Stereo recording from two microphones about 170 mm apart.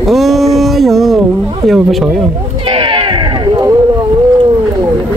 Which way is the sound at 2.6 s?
30° right (ahead or behind).